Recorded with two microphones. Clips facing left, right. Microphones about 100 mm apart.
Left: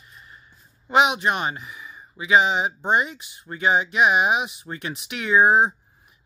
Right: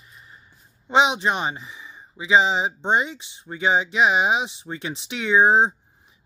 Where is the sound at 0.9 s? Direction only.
30° right (ahead or behind).